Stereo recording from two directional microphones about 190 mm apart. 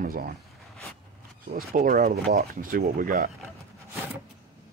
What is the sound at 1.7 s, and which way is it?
Speech, 45° right (ahead or behind).